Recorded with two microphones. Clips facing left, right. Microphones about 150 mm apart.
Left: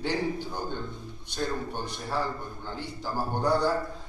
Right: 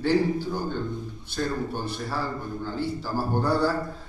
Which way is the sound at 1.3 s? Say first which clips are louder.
Right 3 dB; 15° left (ahead or behind).